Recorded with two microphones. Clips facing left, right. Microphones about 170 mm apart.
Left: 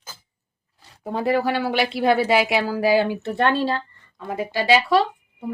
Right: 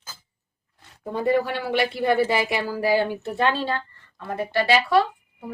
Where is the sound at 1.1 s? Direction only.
80° left.